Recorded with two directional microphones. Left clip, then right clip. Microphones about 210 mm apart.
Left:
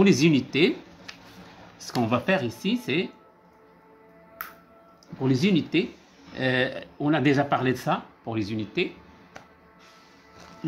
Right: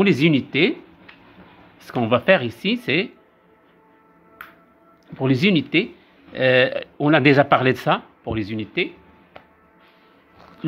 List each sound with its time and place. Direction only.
0.0 s speech: 35° right (ahead or behind)
1.9 s speech: 30° right (ahead or behind)
5.0 s speech: 45° right (ahead or behind)
8.2 s speech: 25° right (ahead or behind)